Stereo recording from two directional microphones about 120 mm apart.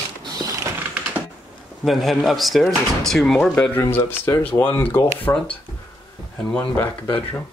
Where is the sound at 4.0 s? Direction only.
20° left (ahead or behind).